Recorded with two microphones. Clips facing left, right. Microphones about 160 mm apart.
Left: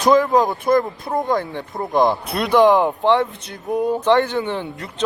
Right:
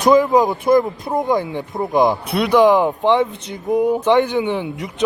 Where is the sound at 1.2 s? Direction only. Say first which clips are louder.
Right 2 dB; 15° right (ahead or behind).